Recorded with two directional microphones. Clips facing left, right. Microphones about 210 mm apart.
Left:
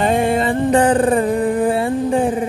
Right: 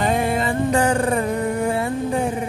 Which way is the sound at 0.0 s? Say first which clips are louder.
Left 4 dB; 30° left (ahead or behind).